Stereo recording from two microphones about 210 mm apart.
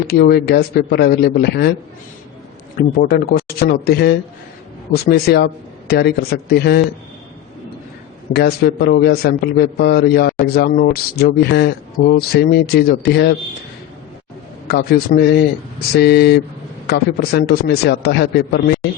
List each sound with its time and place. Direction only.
0.1 s a man's voice: 45° left (ahead or behind)
2.7 s a man's voice: 45° left (ahead or behind)
8.3 s a man's voice: 50° left (ahead or behind)
14.7 s a man's voice: 45° left (ahead or behind)